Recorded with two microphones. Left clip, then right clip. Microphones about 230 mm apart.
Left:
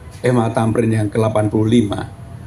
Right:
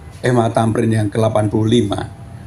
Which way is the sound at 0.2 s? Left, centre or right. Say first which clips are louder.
Right 1 dB; right.